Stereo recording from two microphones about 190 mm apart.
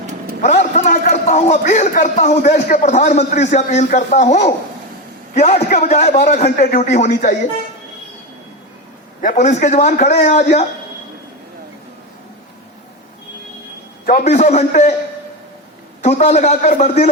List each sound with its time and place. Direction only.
0.4 s a man's voice: 40° left (ahead or behind)
9.2 s a man's voice: 40° left (ahead or behind)
14.0 s a man's voice: 45° left (ahead or behind)
16.0 s a man's voice: 40° left (ahead or behind)